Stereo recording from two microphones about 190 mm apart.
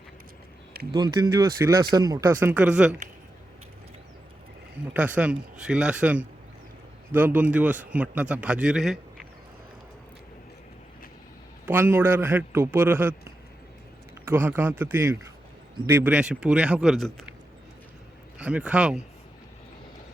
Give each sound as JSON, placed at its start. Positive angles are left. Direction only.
{"t": 0.9, "sound": "speech", "side_deg": -20}
{"t": 4.9, "sound": "a man's voice", "side_deg": -5}
{"t": 11.6, "sound": "a man's voice", "side_deg": -10}
{"t": 18.3, "sound": "speech", "side_deg": -5}